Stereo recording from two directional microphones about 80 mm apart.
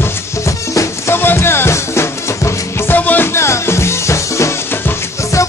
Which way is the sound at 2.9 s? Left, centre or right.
Left.